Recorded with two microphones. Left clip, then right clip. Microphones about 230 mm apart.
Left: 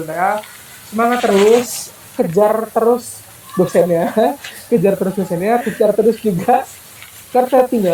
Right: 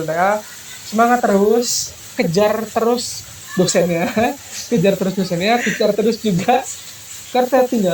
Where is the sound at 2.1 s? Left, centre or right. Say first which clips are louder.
Left 3 dB; right.